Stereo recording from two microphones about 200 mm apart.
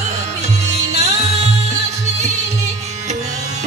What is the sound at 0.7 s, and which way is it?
Music, 35° right (ahead or behind).